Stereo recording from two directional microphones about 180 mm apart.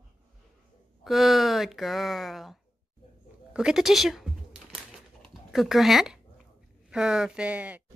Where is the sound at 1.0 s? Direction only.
Centre (ahead or behind).